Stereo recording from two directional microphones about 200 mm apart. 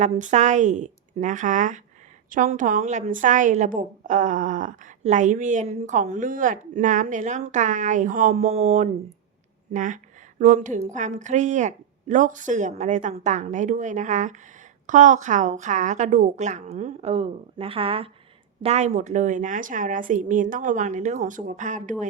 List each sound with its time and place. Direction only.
0.0 s a woman's voice: 35° right (ahead or behind)